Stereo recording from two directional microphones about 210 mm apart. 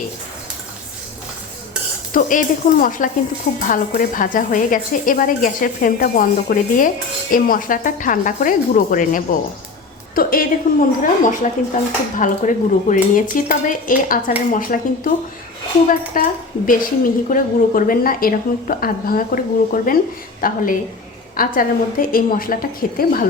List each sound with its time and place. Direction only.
2.1 s a woman's voice: 40° left (ahead or behind)
16.1 s a woman's voice: 40° left (ahead or behind)